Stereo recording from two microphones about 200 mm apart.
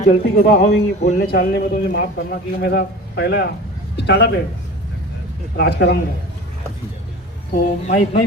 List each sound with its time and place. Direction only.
0.1 s a man's voice: 45° left (ahead or behind); by 4.3 s 60° left (ahead or behind)
5.5 s a man's voice: 55° left (ahead or behind)
7.5 s speech: 40° left (ahead or behind)